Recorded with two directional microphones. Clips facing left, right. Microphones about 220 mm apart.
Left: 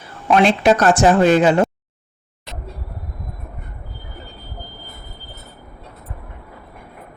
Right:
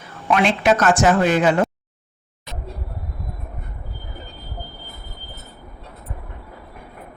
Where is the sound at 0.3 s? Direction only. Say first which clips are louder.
Left 3 dB; 35° left (ahead or behind).